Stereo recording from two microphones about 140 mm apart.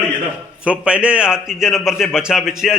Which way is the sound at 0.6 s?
10° right (ahead or behind).